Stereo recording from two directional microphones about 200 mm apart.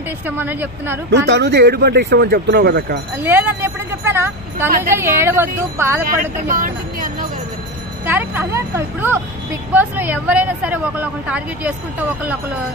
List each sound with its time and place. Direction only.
0.4 s speech: 10° right (ahead or behind)
1.1 s speech: 60° right (ahead or behind)
3.2 s speech: 10° right (ahead or behind)
6.0 s speech: 45° right (ahead or behind)
8.1 s speech: 10° right (ahead or behind)